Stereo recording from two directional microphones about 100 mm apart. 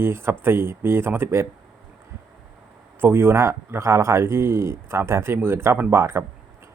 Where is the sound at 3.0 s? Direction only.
25° right (ahead or behind).